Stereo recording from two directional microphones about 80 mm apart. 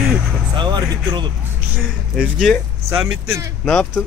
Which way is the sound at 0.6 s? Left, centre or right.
Right.